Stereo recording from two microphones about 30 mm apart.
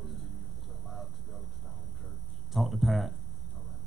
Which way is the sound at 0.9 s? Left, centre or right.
Centre.